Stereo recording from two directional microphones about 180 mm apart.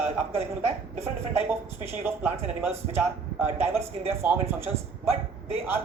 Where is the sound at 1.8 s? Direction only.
15° right (ahead or behind).